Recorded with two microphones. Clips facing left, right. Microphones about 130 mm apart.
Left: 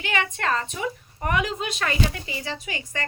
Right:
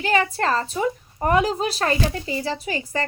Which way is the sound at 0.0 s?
35° right (ahead or behind).